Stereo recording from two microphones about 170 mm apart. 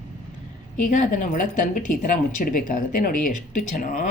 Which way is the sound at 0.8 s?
45° left (ahead or behind).